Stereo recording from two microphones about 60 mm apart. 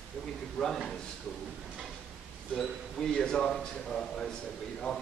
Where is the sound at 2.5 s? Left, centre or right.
Centre.